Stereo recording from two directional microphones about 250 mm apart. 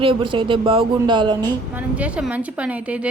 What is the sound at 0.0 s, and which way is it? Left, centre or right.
Speech, right.